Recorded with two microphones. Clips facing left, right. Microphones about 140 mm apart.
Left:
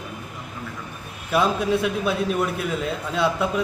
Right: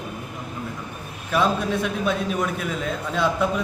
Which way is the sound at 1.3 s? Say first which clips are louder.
Left 1 dB; 10° left (ahead or behind).